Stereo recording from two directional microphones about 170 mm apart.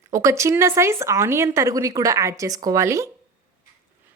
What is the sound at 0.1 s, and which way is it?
Speech, 15° right (ahead or behind).